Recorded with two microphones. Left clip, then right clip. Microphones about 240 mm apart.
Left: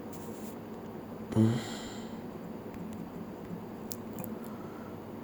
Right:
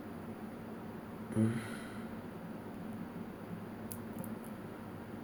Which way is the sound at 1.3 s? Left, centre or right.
Centre.